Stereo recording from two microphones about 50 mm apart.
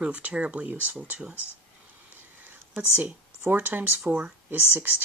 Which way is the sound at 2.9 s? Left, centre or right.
Right.